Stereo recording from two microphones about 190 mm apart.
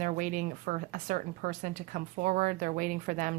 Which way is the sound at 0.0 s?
40° right (ahead or behind).